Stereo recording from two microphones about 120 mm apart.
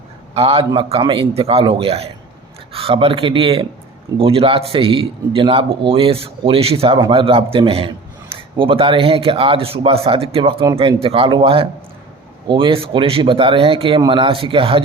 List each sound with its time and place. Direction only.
0.3 s a man's voice: 55° right (ahead or behind)